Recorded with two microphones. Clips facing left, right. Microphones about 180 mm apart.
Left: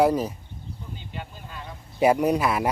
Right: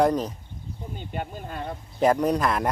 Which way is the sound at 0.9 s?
50° right (ahead or behind).